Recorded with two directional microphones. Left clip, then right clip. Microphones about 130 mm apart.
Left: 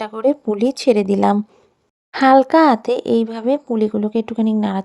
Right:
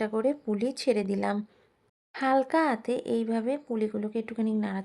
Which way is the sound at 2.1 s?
70° left (ahead or behind).